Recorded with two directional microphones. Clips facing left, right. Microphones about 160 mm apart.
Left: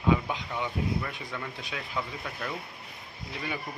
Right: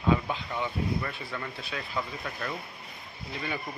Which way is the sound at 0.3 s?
15° left (ahead or behind).